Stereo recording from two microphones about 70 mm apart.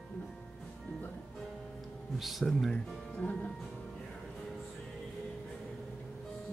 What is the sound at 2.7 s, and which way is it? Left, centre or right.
Speech, centre.